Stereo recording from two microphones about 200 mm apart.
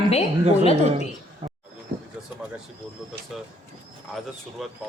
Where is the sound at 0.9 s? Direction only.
30° right (ahead or behind).